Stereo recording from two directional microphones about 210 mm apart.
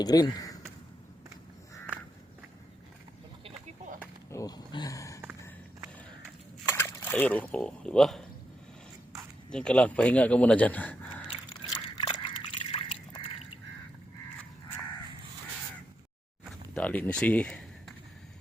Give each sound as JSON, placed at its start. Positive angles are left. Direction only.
{"t": 0.0, "sound": "speech", "side_deg": 15}
{"t": 4.3, "sound": "a sound", "side_deg": 15}
{"t": 6.7, "sound": "speech", "side_deg": 10}
{"t": 9.5, "sound": "speech", "side_deg": 5}
{"t": 11.9, "sound": "duck", "side_deg": 20}
{"t": 16.7, "sound": "speech", "side_deg": 5}